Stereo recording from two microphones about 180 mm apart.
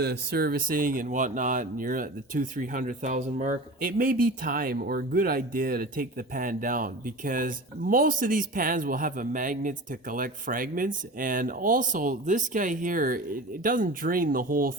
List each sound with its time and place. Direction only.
0.0 s speech: 65° right (ahead or behind)